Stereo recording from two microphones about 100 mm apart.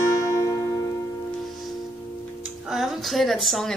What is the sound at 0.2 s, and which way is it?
Music, 30° left (ahead or behind).